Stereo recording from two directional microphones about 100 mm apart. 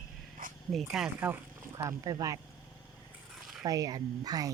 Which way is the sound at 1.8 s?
35° right (ahead or behind).